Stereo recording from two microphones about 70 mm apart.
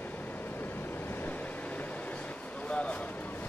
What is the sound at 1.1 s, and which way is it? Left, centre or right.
Waves, left.